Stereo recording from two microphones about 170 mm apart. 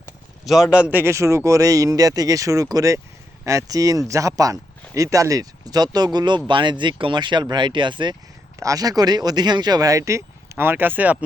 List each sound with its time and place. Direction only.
0.4 s speech: centre (ahead or behind)